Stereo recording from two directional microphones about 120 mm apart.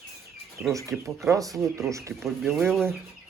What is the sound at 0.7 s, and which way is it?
Speech, 25° right (ahead or behind).